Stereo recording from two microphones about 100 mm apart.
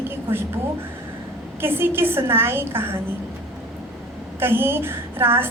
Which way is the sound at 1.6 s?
20° right (ahead or behind).